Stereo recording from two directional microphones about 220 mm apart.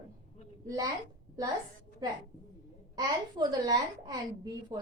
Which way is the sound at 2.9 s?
20° right (ahead or behind).